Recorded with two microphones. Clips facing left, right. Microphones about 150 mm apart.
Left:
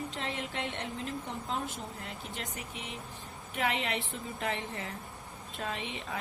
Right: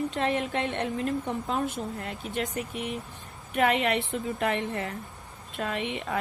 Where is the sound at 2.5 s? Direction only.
55° right (ahead or behind).